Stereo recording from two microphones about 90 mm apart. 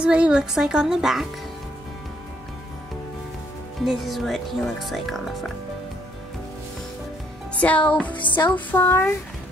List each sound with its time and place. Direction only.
0.0 s a woman's voice: 10° right (ahead or behind)
3.8 s speech: centre (ahead or behind)
7.5 s music: 15° left (ahead or behind)